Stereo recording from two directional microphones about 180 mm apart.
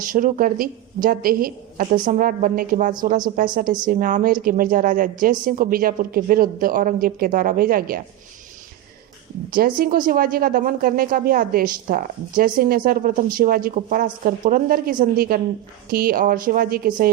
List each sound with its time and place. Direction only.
0.0 s speech: 50° right (ahead or behind)
9.6 s speech: 55° right (ahead or behind)